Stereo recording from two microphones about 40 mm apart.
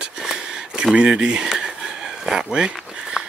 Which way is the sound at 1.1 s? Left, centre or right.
Centre.